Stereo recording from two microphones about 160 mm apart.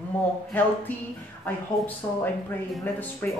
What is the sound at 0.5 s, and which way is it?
Speech, 10° left (ahead or behind).